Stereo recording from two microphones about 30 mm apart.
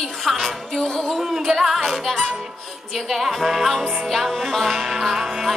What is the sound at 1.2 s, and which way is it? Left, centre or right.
Music, centre.